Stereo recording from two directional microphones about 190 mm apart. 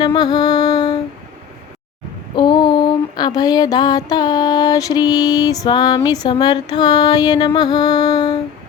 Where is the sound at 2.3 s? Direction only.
25° left (ahead or behind).